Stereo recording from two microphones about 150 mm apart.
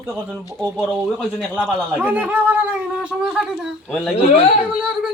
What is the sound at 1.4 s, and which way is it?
Speech, centre (ahead or behind).